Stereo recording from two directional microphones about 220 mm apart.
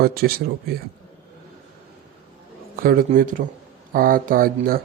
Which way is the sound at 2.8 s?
40° right (ahead or behind).